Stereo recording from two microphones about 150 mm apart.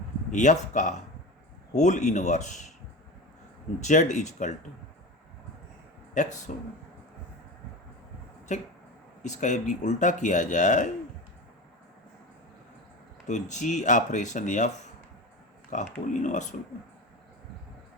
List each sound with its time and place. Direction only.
0.3 s speech: 55° left (ahead or behind)
3.8 s speech: 55° left (ahead or behind)
6.5 s speech: 55° left (ahead or behind)
8.5 s speech: 50° left (ahead or behind)
13.2 s speech: 55° left (ahead or behind)
15.7 s speech: 55° left (ahead or behind)